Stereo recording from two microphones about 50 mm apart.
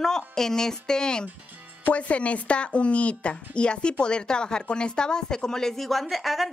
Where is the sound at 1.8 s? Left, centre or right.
Left.